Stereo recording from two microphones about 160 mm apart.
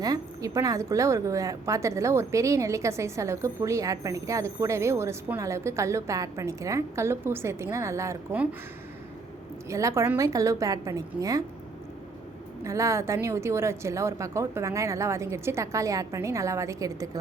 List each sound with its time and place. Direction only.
0.0 s a woman's voice: 20° right (ahead or behind)
9.6 s a woman's voice: 20° right (ahead or behind)
12.6 s a woman's voice: 20° right (ahead or behind)